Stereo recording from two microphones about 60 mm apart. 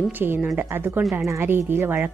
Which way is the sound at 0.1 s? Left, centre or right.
Right.